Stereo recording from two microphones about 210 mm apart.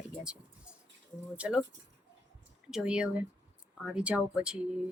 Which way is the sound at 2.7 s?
5° right (ahead or behind).